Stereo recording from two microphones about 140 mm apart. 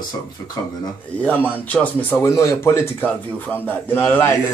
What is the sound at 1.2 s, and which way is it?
Speech, 10° left (ahead or behind).